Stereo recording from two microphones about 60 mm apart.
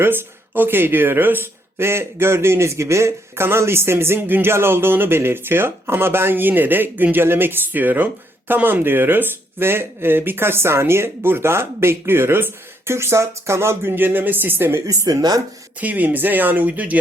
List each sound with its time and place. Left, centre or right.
0.0 s speech: right
14.8 s speech: right
15.8 s speech: right